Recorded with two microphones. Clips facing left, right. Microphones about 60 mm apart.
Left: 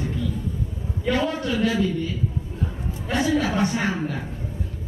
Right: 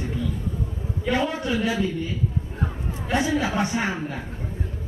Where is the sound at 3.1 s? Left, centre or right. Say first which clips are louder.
Left 1 dB; centre.